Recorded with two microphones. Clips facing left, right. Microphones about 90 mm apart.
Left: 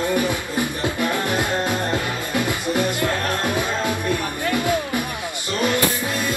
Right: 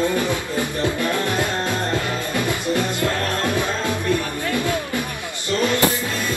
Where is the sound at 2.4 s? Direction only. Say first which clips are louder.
Left 1 dB; 20° left (ahead or behind).